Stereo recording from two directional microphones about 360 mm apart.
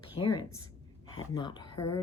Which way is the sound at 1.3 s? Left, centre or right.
Centre.